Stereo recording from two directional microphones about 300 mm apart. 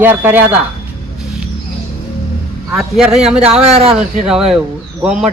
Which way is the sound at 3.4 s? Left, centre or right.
Centre.